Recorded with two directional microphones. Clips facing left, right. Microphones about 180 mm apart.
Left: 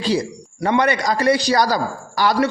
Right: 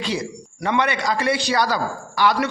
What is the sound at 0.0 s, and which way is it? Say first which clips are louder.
A man's voice: left 5 dB; 35° left (ahead or behind).